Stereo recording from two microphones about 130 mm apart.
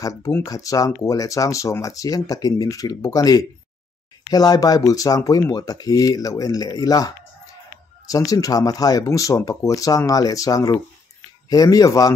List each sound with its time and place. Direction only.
0.0 s speech: 25° left (ahead or behind)